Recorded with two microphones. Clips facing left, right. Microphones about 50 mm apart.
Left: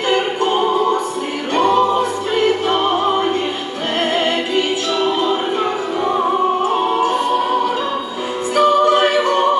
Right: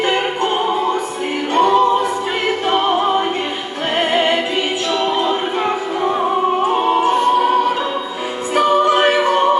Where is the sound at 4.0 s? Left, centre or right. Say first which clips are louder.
Right 2 dB; centre.